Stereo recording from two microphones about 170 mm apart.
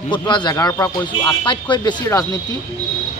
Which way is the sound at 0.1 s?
25° left (ahead or behind).